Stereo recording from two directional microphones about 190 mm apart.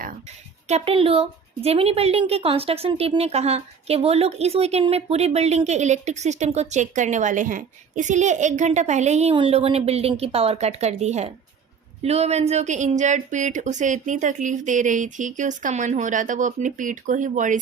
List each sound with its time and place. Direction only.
0.7 s a woman's voice: 30° right (ahead or behind)